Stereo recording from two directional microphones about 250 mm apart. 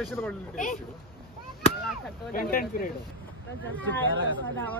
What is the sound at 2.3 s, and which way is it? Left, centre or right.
Speech, left.